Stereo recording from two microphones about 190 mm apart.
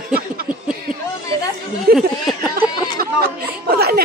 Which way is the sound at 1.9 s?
55° right (ahead or behind).